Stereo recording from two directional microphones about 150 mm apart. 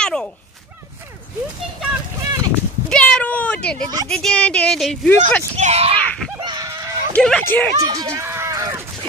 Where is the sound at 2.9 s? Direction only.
5° left (ahead or behind).